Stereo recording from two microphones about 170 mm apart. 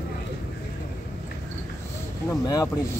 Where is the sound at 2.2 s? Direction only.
20° left (ahead or behind).